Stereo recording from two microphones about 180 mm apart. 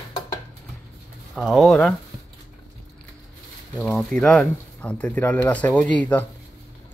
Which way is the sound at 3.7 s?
5° left (ahead or behind).